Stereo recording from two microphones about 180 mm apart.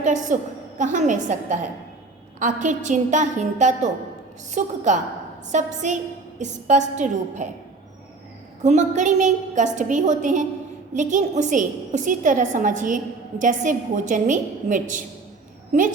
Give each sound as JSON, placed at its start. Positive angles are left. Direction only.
{"t": 0.0, "sound": "a woman's voice", "side_deg": -40}
{"t": 8.6, "sound": "a woman's voice", "side_deg": -40}